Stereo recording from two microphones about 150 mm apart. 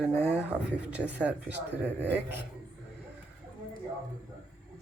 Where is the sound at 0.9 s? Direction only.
10° right (ahead or behind).